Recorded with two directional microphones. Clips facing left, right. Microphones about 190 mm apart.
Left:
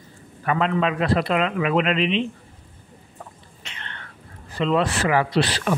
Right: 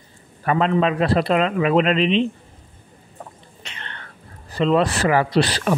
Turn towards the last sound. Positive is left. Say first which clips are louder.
# right 3 dB
turn(degrees=-40)  # may be behind; listen again after turning